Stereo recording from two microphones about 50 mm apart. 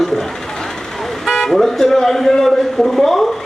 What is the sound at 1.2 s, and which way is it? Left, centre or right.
Speech, centre.